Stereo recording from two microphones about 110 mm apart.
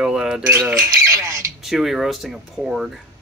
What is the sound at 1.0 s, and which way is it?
Squawk, 30° right (ahead or behind).